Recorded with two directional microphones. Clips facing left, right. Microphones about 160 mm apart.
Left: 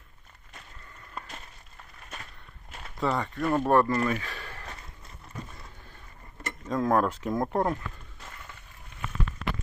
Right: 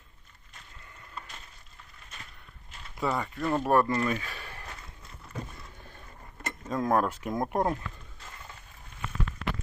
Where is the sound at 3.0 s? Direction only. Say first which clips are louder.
Left 2 dB; 10° right (ahead or behind).